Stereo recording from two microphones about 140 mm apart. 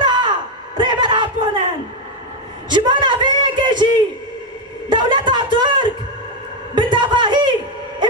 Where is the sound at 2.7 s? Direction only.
35° right (ahead or behind).